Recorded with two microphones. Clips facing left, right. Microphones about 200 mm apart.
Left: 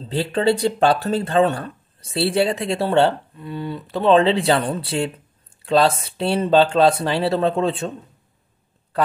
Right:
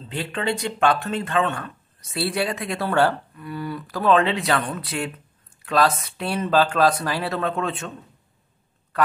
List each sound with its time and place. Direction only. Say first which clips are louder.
0.0 s speech: left 8 dB; 35° left (ahead or behind)